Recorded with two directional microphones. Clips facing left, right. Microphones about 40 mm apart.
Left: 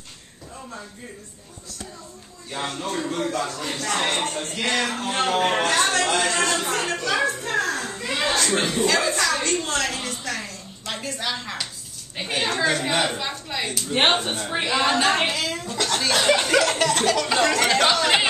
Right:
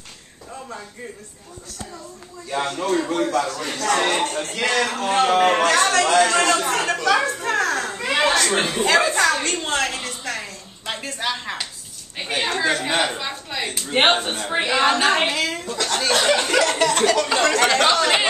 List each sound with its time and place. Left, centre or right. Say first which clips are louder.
2.6 s speech: right 5 dB; right
7.4 s a sound: right 3 dB; right
8.6 s speech: right 1 dB; right
8.9 s a woman's voice: right 4 dB; right
12.2 s a woman's voice: right 1 dB; centre
13.7 s a woman's voice: right 3 dB; right; by 15.0 s centre
15.0 s speech: right 2 dB; right
15.9 s chuckle: right 2 dB; centre
16.2 s a woman's voice: even; centre
17.8 s speech: right 2 dB; centre